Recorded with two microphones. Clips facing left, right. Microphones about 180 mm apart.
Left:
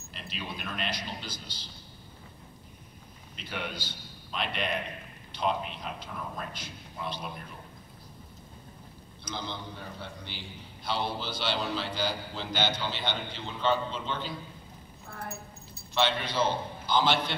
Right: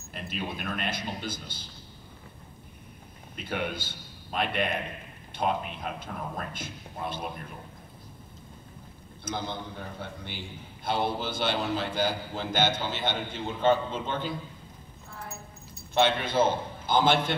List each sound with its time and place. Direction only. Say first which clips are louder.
0.1 s a man's voice: right 5 dB; 50° right (ahead or behind)
3.3 s a man's voice: right 5 dB; 50° right (ahead or behind)
9.2 s a man's voice: right 4 dB; 50° right (ahead or behind)
15.9 s a man's voice: right 4 dB; 50° right (ahead or behind)